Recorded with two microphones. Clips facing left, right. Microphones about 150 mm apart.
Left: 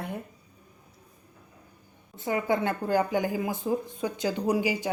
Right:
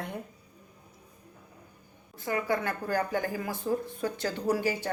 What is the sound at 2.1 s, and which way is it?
A woman's voice, 20° left (ahead or behind).